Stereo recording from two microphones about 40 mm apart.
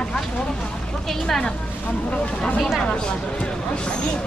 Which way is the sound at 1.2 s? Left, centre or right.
Centre.